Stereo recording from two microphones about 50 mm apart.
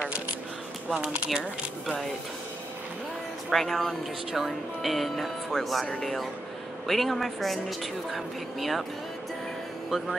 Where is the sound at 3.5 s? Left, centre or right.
Centre.